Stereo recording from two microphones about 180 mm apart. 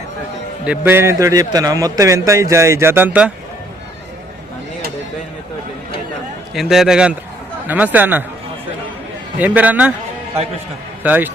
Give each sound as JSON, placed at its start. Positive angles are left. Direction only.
{"t": 0.6, "sound": "a man's voice", "side_deg": -10}
{"t": 6.5, "sound": "a man's voice", "side_deg": 0}
{"t": 9.4, "sound": "a man's voice", "side_deg": -10}
{"t": 11.0, "sound": "speech", "side_deg": -10}